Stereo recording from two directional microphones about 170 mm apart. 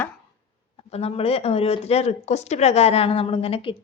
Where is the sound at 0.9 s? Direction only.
35° left (ahead or behind).